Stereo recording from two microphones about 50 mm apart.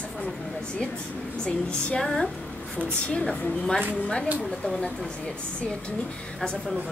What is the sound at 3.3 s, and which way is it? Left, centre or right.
Speech, centre.